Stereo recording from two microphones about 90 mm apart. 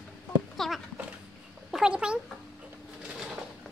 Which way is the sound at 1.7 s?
10° right (ahead or behind).